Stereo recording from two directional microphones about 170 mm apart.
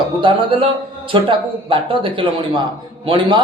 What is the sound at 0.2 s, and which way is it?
Speech, 30° right (ahead or behind).